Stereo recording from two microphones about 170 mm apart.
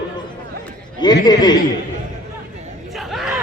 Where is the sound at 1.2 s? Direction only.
25° left (ahead or behind).